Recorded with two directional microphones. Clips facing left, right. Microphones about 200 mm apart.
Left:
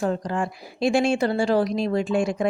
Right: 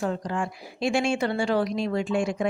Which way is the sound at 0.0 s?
40° left (ahead or behind).